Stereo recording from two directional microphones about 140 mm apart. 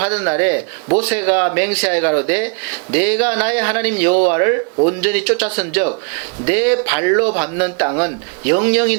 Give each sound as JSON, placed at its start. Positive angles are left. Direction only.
{"t": 0.0, "sound": "speech", "side_deg": -10}